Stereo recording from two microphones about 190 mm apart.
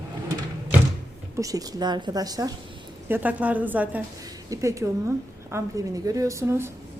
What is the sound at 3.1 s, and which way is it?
A woman's voice, 10° right (ahead or behind).